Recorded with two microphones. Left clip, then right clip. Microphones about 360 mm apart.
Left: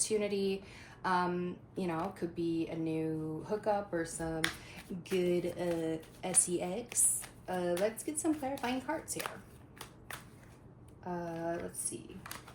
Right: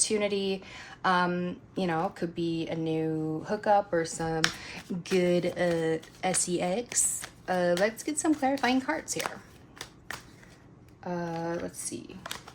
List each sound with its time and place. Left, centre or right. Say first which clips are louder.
0.0 s speech: right 5 dB; right
11.2 s speech: right 4 dB; right